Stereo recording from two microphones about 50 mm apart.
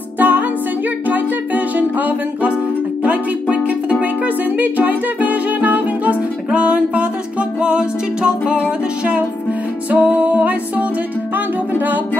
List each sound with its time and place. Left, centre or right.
0.2 s music: right